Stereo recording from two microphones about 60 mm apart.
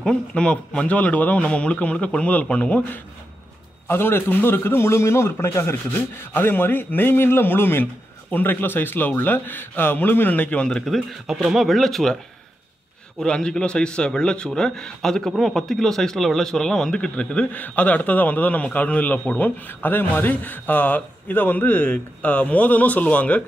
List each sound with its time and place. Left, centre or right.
0.0 s a man's voice: centre
3.8 s a man's voice: left
6.3 s a man's voice: left
10.9 s speech: centre
13.2 s a man's voice: centre